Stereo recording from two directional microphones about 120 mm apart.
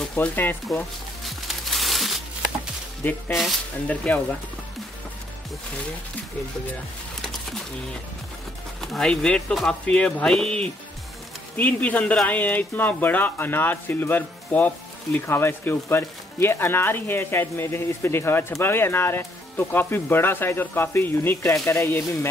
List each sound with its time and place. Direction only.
0.0 s speech: 10° left (ahead or behind)
1.2 s music: centre (ahead or behind)
3.0 s speech: 15° left (ahead or behind)
8.8 s speech: 5° left (ahead or behind); by 22.3 s 20° left (ahead or behind)